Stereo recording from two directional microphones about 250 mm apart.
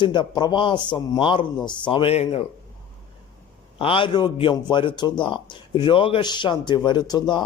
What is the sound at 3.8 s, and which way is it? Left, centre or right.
A man's voice, left.